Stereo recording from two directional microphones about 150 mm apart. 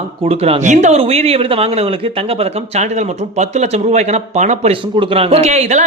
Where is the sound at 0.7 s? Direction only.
50° right (ahead or behind).